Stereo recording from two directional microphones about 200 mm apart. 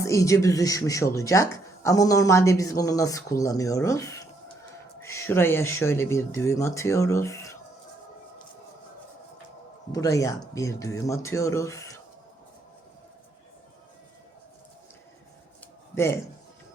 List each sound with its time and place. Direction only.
0.0 s speech: 15° left (ahead or behind)
9.9 s speech: 15° left (ahead or behind)